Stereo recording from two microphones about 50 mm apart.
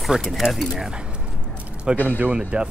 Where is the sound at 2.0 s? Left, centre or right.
Right.